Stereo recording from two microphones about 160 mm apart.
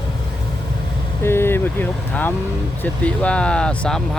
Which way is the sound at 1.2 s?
15° left (ahead or behind).